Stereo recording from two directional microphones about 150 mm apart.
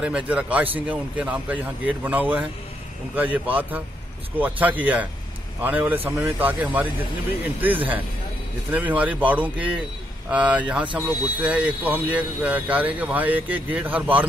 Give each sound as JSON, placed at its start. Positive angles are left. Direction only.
{"t": 0.0, "sound": "speech", "side_deg": -10}
{"t": 8.7, "sound": "speech", "side_deg": -10}